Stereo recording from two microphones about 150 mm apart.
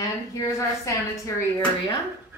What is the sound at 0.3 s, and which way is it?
Speech, 20° left (ahead or behind).